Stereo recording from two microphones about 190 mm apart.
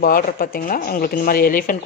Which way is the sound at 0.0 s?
50° left (ahead or behind).